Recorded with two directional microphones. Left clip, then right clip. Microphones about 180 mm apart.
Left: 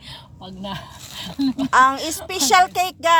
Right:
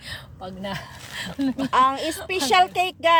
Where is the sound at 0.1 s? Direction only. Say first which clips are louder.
Right 3 dB; 40° right (ahead or behind).